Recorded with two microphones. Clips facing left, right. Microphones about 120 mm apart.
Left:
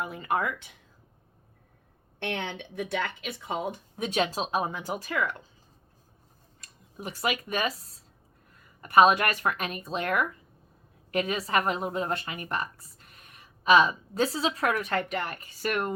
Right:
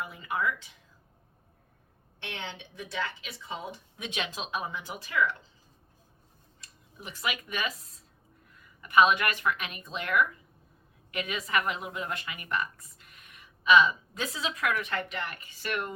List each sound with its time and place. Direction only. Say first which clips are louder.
0.0 s speech: left 3 dB; 50° left (ahead or behind)
2.1 s speech: left 7 dB; 55° left (ahead or behind)
3.9 s a woman's voice: left 9 dB; 40° left (ahead or behind)
6.6 s a woman's voice: left 7 dB; 40° left (ahead or behind)